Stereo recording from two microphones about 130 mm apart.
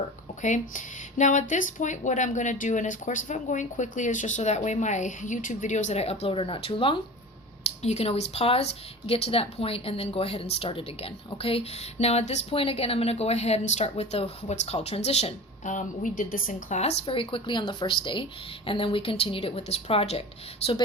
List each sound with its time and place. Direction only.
0.4 s speech: 75° left (ahead or behind); by 7.0 s 40° left (ahead or behind)
7.8 s speech: 55° left (ahead or behind)